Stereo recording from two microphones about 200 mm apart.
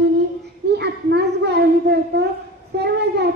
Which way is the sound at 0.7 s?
55° right (ahead or behind).